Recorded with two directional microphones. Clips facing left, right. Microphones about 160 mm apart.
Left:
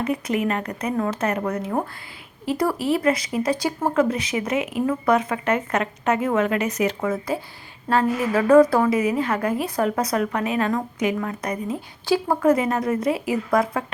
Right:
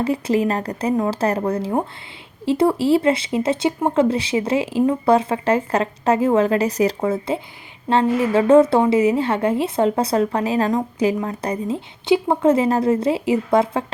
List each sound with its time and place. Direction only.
0.0 s a woman's voice: 30° right (ahead or behind)